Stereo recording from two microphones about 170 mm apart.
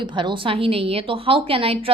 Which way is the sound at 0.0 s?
25° right (ahead or behind).